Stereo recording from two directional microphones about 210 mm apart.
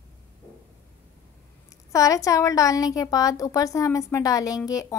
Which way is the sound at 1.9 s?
15° left (ahead or behind).